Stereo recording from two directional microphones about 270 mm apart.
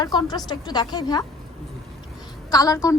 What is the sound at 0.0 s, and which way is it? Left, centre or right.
A woman's voice, centre.